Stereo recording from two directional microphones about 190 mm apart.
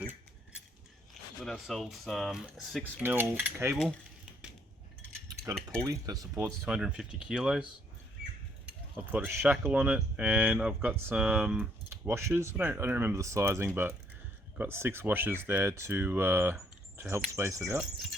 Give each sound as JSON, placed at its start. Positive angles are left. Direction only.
{"t": 1.4, "sound": "speech", "side_deg": 0}
{"t": 5.3, "sound": "a sound", "side_deg": -15}
{"t": 5.8, "sound": "speech", "side_deg": -15}
{"t": 9.1, "sound": "speech", "side_deg": -10}